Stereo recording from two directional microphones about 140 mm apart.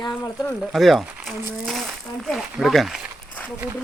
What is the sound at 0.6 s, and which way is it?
Speech, centre (ahead or behind).